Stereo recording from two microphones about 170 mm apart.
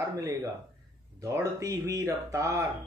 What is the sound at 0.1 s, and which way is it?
Speech, 20° right (ahead or behind).